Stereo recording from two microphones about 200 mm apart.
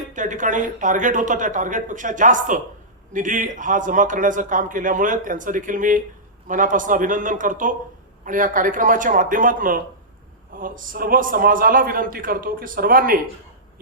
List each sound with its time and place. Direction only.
0.1 s a man's voice: 40° right (ahead or behind)